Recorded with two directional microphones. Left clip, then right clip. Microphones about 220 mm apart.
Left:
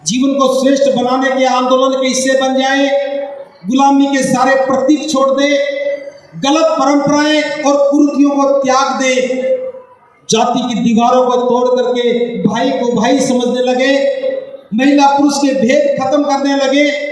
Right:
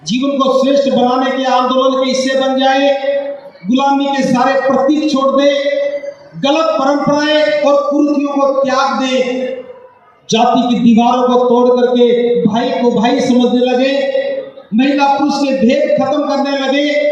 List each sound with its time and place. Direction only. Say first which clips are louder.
0.1 s a man's voice: left 1 dB; 55° left (ahead or behind)
10.3 s a man's voice: right 2 dB; 55° left (ahead or behind)